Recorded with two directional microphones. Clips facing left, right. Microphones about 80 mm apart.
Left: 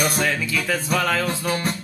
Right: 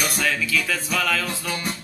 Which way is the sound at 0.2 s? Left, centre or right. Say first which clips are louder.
Left 1 dB; left.